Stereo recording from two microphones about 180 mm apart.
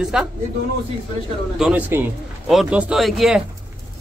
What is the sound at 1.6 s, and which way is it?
A man's voice, 10° right (ahead or behind).